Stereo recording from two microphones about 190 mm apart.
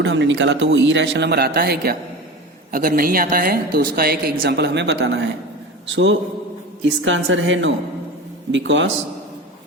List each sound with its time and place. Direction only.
0.0 s a man's voice: 70° right (ahead or behind)